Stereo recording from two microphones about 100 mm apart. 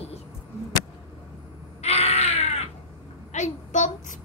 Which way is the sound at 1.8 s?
90° left.